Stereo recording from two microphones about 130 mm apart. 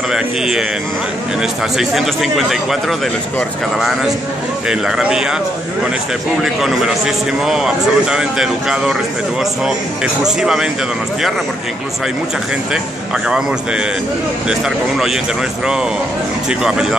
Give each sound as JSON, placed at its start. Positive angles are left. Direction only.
{"t": 0.1, "sound": "a man's voice", "side_deg": -5}
{"t": 4.6, "sound": "a man's voice", "side_deg": -5}
{"t": 6.4, "sound": "a man's voice", "side_deg": -5}
{"t": 10.2, "sound": "a man's voice", "side_deg": -5}
{"t": 14.5, "sound": "a man's voice", "side_deg": 0}
{"t": 16.4, "sound": "a man's voice", "side_deg": -5}